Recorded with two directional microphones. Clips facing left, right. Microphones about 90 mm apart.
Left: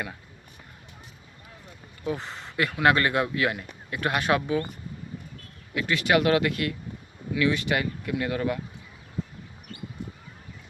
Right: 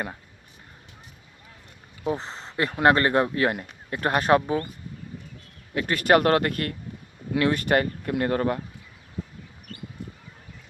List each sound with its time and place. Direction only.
2.0 s speech: 30° right (ahead or behind)
5.7 s speech: 45° right (ahead or behind)